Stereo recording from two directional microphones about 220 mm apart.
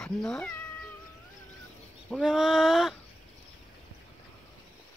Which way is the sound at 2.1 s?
Centre (ahead or behind).